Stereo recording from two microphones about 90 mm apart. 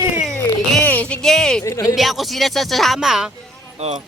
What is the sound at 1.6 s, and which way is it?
Speech, 35° left (ahead or behind).